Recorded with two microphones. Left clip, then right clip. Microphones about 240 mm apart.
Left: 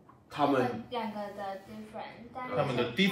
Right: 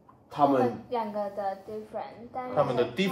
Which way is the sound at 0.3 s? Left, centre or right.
Centre.